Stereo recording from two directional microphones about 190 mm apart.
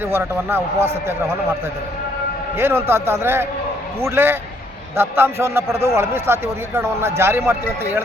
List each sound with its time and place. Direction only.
0.0 s a man's voice: 10° right (ahead or behind)
2.6 s a man's voice: 10° right (ahead or behind)